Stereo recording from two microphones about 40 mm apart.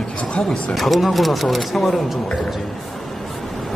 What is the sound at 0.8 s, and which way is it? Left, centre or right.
Speech, centre.